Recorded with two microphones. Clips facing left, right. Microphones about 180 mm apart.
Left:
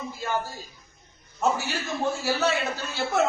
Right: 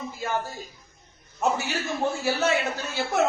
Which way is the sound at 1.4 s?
15° right (ahead or behind).